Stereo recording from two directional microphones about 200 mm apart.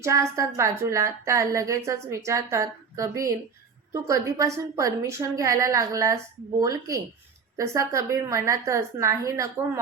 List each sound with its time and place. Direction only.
0.0 s a woman's voice: 15° right (ahead or behind)